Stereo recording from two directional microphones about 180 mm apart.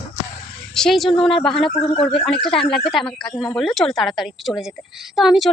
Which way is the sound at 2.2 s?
5° left (ahead or behind).